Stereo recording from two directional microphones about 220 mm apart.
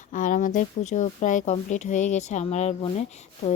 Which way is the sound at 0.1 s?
35° left (ahead or behind).